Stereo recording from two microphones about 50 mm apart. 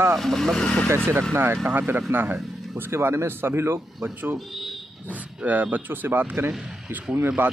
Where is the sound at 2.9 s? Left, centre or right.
Right.